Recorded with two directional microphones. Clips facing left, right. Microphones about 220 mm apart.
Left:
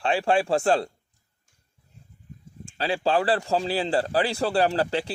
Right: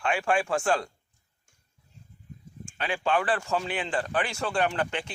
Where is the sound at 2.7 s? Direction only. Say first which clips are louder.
Left 4 dB; 30° left (ahead or behind).